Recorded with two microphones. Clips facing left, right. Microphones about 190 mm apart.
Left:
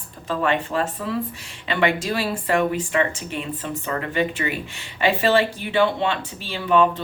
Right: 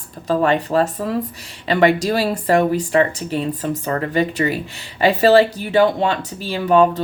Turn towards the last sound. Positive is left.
turn(degrees=-40)  # may be behind; listen again after turning